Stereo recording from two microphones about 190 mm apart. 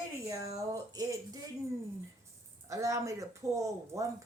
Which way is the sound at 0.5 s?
20° right (ahead or behind).